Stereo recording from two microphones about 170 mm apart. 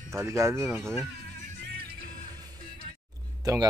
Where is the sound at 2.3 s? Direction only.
20° right (ahead or behind).